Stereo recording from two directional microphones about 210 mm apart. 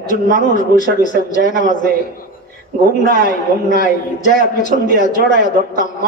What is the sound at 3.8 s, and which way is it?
Speech, 35° left (ahead or behind).